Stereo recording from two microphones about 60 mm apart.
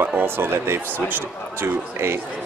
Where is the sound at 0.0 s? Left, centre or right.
Right.